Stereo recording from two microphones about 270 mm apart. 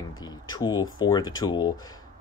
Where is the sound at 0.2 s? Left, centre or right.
Centre.